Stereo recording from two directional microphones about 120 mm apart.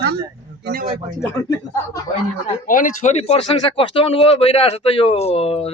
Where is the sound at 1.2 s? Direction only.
20° left (ahead or behind).